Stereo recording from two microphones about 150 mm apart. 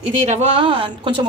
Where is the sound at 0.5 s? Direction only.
35° right (ahead or behind).